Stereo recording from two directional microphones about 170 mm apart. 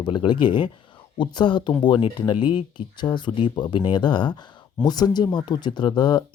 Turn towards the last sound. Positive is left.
turn(degrees=25)  # may be behind; listen again after turning